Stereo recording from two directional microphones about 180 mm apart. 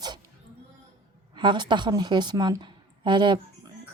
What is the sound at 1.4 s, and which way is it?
A woman's voice, 25° right (ahead or behind).